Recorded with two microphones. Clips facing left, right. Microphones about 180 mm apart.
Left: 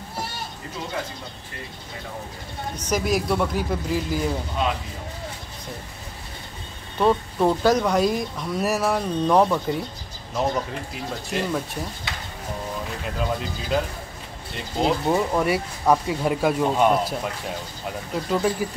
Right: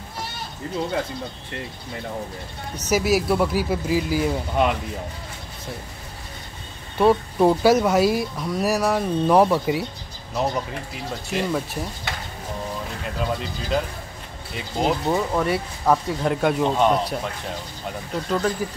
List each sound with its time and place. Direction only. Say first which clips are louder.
2.9 s speech: right 3 dB; 5° right (ahead or behind)
4.6 s speech: right 5 dB; 60° right (ahead or behind)
7.0 s speech: right 3 dB; 10° right (ahead or behind)
10.9 s speech: even; centre (ahead or behind)
13.0 s speech: even; centre (ahead or behind)
15.0 s speech: left 1 dB; 10° left (ahead or behind)